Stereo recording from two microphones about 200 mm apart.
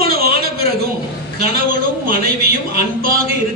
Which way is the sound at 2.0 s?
50° right (ahead or behind).